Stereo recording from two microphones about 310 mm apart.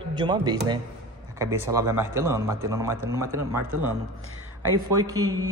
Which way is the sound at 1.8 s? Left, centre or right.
Centre.